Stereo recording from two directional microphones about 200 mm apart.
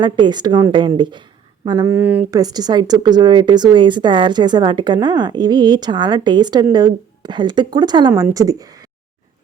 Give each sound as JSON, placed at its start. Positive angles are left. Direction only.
{"t": 0.0, "sound": "speech", "side_deg": -20}
{"t": 1.6, "sound": "a sound", "side_deg": -20}
{"t": 2.3, "sound": "speech", "side_deg": -20}